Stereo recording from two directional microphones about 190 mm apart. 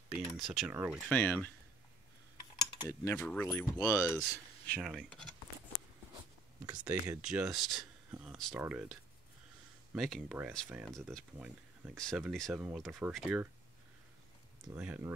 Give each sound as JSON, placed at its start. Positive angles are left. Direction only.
{"t": 0.1, "sound": "speech", "side_deg": -5}
{"t": 2.5, "sound": "cutlery", "side_deg": 20}
{"t": 3.4, "sound": "speech", "side_deg": 15}
{"t": 4.7, "sound": "speech", "side_deg": 0}
{"t": 6.6, "sound": "speech", "side_deg": -20}
{"t": 6.9, "sound": "speech", "side_deg": -5}
{"t": 9.9, "sound": "speech", "side_deg": 0}
{"t": 11.3, "sound": "speech", "side_deg": -10}
{"t": 12.0, "sound": "speech", "side_deg": 0}
{"t": 14.8, "sound": "speech", "side_deg": -5}